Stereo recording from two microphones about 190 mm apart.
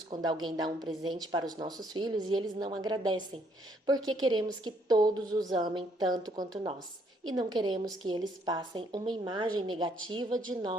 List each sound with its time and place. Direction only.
0.1 s a woman's voice: 25° right (ahead or behind)